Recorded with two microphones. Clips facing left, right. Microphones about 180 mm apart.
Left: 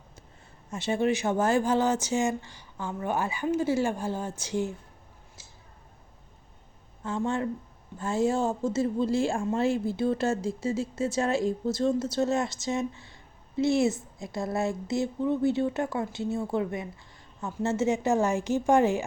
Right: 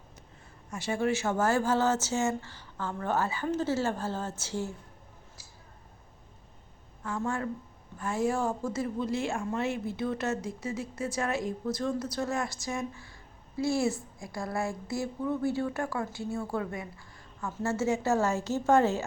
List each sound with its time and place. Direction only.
0.7 s speech: 20° left (ahead or behind)
7.2 s a woman's voice: 25° left (ahead or behind)